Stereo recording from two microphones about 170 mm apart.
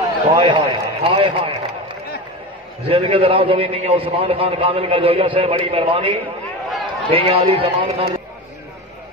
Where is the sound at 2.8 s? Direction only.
35° right (ahead or behind).